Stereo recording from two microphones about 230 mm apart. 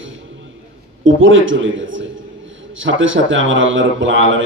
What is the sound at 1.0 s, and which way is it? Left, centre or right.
A man's voice, right.